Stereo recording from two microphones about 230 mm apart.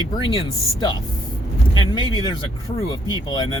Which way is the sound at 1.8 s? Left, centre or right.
Centre.